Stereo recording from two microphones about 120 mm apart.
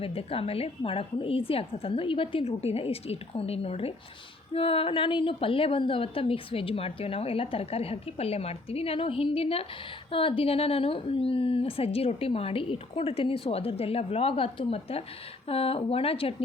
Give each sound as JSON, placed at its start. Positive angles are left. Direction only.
{"t": 0.0, "sound": "a woman's voice", "side_deg": 55}